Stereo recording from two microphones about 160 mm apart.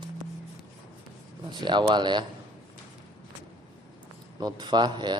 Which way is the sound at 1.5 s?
30° right (ahead or behind).